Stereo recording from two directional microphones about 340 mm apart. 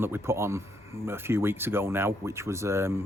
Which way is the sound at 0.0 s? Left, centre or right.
Centre.